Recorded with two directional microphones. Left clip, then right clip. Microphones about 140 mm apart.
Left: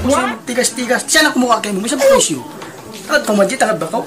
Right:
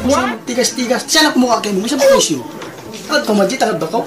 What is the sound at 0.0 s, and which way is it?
Speech, centre (ahead or behind).